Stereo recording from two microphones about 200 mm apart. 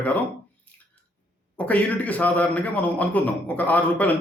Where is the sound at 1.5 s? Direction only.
5° left (ahead or behind).